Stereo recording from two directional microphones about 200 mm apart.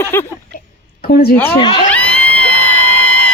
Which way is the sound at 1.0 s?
45° left (ahead or behind).